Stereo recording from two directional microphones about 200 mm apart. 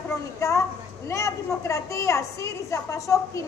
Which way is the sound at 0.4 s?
15° left (ahead or behind).